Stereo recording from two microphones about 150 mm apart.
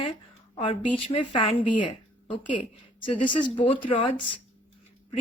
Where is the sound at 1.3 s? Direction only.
35° left (ahead or behind).